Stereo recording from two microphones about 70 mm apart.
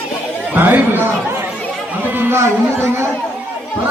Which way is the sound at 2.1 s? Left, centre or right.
Right.